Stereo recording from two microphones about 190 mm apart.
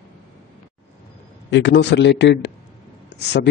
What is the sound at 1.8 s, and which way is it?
Speech, 65° left (ahead or behind).